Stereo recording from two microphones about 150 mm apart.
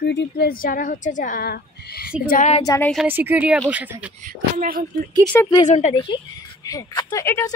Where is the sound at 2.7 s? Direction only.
25° left (ahead or behind).